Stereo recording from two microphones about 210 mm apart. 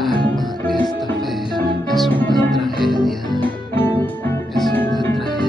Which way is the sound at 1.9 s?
5° left (ahead or behind).